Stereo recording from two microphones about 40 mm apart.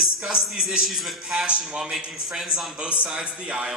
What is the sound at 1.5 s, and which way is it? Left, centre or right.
Speech, right.